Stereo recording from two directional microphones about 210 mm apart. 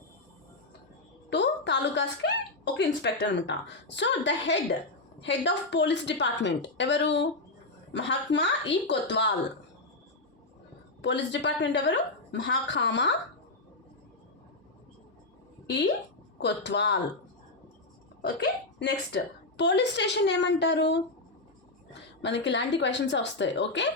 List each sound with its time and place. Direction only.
1.3 s a sound: 55° left (ahead or behind)
2.7 s a woman's voice: 55° left (ahead or behind)
11.0 s a woman's voice: 55° left (ahead or behind)
15.6 s a woman's voice: 55° left (ahead or behind)
18.2 s a woman's voice: 55° left (ahead or behind)
22.2 s a woman's voice: 55° left (ahead or behind)